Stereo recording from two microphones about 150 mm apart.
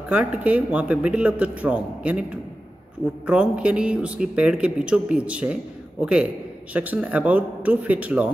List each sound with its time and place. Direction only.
0.1 s speech: 10° right (ahead or behind)